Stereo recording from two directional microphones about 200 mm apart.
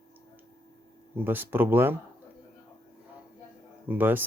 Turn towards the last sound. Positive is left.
turn(degrees=-10)  # may be behind; listen again after turning